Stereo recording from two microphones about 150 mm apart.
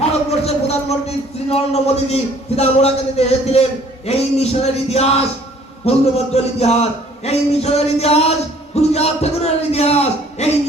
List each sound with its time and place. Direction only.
0.0 s speech: 45° left (ahead or behind)